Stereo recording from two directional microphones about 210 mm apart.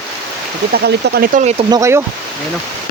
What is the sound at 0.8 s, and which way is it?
Speech, 45° right (ahead or behind).